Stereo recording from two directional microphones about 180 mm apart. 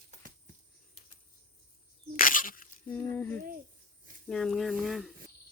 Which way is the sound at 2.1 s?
50° left (ahead or behind).